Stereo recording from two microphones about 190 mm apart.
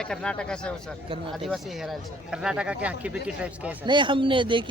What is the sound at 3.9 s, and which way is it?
Speech, 25° right (ahead or behind).